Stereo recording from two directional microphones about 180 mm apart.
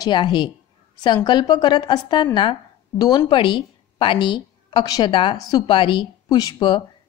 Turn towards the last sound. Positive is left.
turn(degrees=25)  # may be behind; listen again after turning